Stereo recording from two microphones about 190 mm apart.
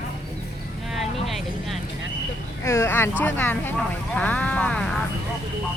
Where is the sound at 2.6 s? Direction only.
15° left (ahead or behind).